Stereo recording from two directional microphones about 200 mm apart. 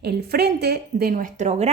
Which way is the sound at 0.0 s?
55° right (ahead or behind).